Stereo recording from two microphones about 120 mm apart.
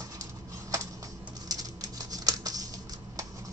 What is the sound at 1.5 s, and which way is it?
Patter, 30° right (ahead or behind).